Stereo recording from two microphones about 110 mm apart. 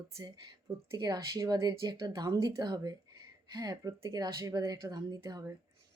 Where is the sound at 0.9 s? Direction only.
35° right (ahead or behind).